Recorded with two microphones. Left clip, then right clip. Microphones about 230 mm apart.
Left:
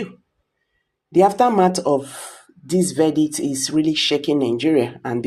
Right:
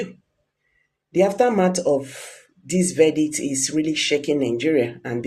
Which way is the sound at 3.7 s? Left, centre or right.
Left.